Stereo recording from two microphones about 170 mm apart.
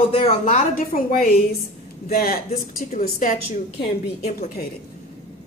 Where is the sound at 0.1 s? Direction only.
40° left (ahead or behind); by 3.3 s 55° left (ahead or behind).